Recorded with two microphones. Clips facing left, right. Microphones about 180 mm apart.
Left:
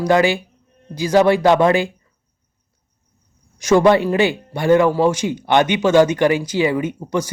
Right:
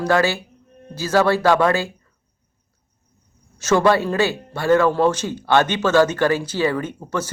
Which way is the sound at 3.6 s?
15° left (ahead or behind).